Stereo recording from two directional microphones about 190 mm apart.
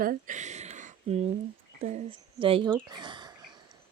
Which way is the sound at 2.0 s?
25° right (ahead or behind).